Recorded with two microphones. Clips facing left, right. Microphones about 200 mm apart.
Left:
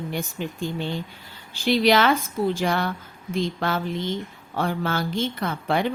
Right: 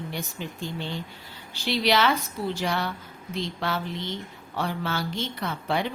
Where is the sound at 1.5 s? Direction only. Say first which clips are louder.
Left 5 dB; 50° left (ahead or behind).